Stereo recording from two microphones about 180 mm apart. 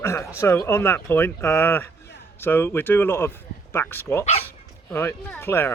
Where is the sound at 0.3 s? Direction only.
15° left (ahead or behind).